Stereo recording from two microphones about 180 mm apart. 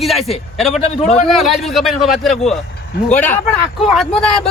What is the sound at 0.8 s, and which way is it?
Speech, 35° left (ahead or behind).